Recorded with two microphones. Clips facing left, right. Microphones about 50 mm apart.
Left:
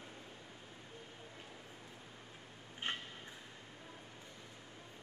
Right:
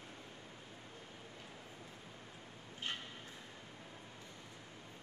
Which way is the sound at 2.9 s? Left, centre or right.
Left.